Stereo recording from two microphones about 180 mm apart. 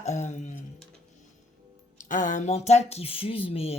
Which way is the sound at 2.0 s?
45° left (ahead or behind).